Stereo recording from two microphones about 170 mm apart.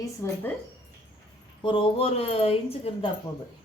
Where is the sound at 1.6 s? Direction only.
30° left (ahead or behind).